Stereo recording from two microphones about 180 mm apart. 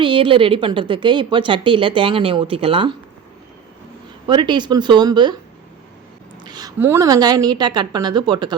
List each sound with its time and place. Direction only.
0.0 s a woman's voice: 30° right (ahead or behind)
4.3 s a woman's voice: 25° right (ahead or behind)
6.4 s a sound: 20° right (ahead or behind)
6.7 s a woman's voice: 15° right (ahead or behind)